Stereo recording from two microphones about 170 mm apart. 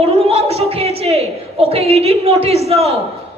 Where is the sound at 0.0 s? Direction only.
35° right (ahead or behind).